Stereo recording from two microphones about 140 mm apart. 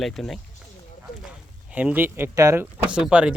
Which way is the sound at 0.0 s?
Centre (ahead or behind).